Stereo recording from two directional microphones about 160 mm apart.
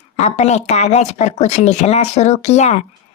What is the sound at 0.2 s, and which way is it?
Speech, 45° left (ahead or behind).